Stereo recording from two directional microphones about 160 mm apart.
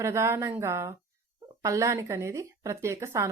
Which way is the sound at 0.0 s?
15° right (ahead or behind).